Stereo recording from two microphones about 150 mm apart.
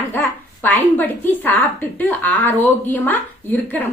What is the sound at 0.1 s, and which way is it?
A woman's voice, 15° left (ahead or behind).